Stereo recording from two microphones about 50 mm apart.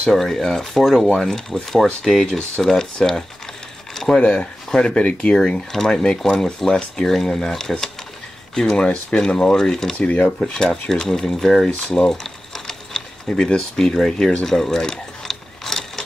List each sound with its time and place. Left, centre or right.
0.1 s speech: centre
3.9 s a sound: centre
4.2 s speech: centre
9.9 s speech: left
10.4 s speech: centre
11.7 s speech: centre
12.1 s a sound: centre
13.3 s speech: centre
14.4 s a sound: centre